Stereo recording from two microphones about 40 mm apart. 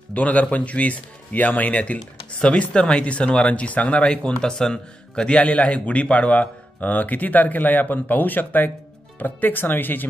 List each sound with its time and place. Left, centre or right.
0.1 s speech: left
2.3 s speech: left